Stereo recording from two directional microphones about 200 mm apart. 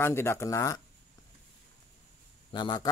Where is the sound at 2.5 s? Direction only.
20° left (ahead or behind).